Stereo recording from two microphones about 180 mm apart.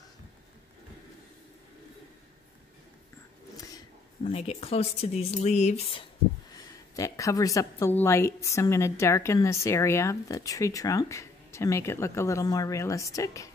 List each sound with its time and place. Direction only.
3.6 s a sound: 20° left (ahead or behind)
4.3 s speech: 35° left (ahead or behind)
7.0 s a woman's voice: 15° left (ahead or behind)